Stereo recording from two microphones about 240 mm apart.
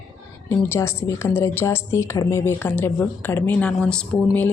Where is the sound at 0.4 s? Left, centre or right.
Centre.